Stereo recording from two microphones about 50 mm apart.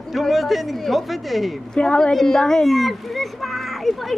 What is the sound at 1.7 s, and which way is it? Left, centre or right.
A woman's voice, centre.